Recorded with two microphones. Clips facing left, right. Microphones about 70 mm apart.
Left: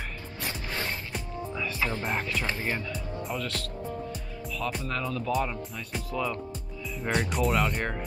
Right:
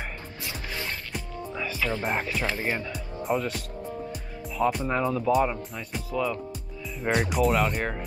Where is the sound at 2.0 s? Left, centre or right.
Centre.